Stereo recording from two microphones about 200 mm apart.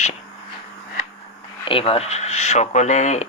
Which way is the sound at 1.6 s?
25° left (ahead or behind).